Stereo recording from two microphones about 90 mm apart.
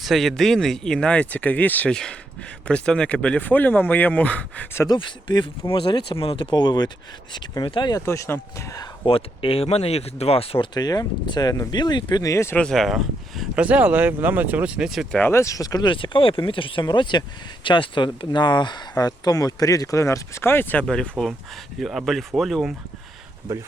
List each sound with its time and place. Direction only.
0.0 s speech: centre (ahead or behind)
4.9 s speech: 60° left (ahead or behind); by 6.5 s 85° left
6.5 s speech: 55° left (ahead or behind)
7.9 s speech: 35° left (ahead or behind)
9.0 s speech: 90° left
10.8 s speech: 45° left (ahead or behind)
12.1 s speech: 40° left (ahead or behind)
12.7 s speech: centre (ahead or behind)
13.6 s speech: 15° right (ahead or behind)
15.3 s speech: 35° left (ahead or behind)
15.9 s speech: 70° left (ahead or behind)
16.8 s speech: 55° left (ahead or behind); by 20.8 s 20° left (ahead or behind)
20.8 s speech: 10° left (ahead or behind)